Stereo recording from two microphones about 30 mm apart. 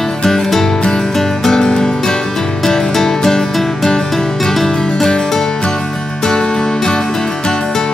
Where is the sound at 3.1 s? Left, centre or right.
Centre.